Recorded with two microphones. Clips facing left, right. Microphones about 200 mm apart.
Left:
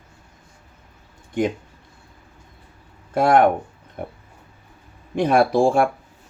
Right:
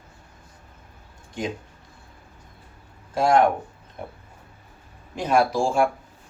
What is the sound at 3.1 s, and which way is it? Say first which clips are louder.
Speech: left 3 dB; 60° left (ahead or behind).